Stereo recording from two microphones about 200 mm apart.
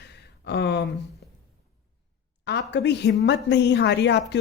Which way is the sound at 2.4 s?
55° left (ahead or behind).